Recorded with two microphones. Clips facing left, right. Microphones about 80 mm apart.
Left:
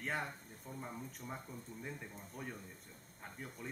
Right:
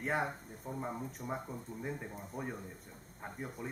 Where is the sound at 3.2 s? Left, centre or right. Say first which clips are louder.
Right 6 dB; right.